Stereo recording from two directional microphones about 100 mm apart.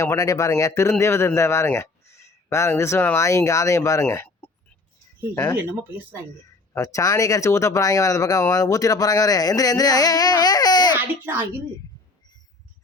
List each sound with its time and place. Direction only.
0.0 s speech: 30° left (ahead or behind)
6.7 s speech: 35° left (ahead or behind)
10.9 s speech: 20° right (ahead or behind)